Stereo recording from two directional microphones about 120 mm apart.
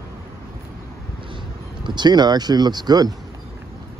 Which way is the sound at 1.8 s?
40° right (ahead or behind).